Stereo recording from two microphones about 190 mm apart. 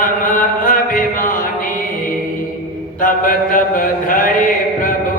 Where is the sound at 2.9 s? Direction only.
45° left (ahead or behind).